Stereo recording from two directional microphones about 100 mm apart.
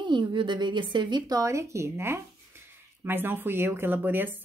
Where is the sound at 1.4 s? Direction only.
30° right (ahead or behind).